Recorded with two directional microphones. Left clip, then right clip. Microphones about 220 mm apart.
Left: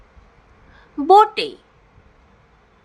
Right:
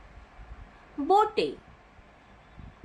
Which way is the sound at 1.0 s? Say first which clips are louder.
Left 11 dB; 45° left (ahead or behind).